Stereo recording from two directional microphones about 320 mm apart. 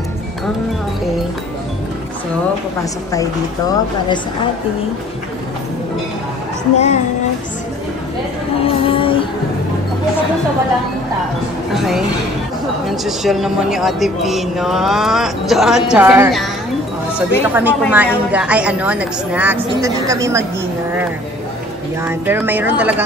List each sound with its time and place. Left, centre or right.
2.8 s a woman's voice: centre
6.7 s child singing: left
8.5 s music: centre
11.7 s a woman's voice: centre
22.0 s a woman's voice: centre